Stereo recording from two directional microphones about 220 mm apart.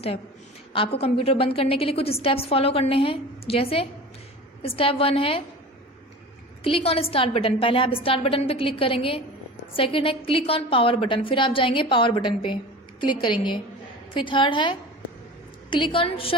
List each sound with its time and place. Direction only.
0.7 s a woman's voice: 25° left (ahead or behind)
6.7 s a woman's voice: 25° left (ahead or behind)